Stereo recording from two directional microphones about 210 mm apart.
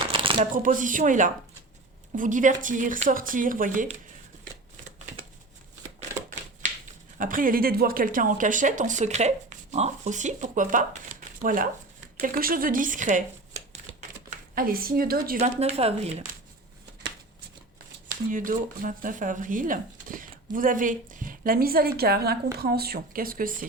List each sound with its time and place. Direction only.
0.1 s a sound: 25° right (ahead or behind)
0.5 s speech: 40° right (ahead or behind)
7.2 s speech: 40° right (ahead or behind)
14.5 s speech: 45° right (ahead or behind)
15.4 s speech: 30° right (ahead or behind)
18.3 s speech: 40° right (ahead or behind)